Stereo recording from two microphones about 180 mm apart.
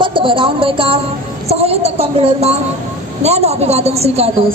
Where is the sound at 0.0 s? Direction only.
30° right (ahead or behind).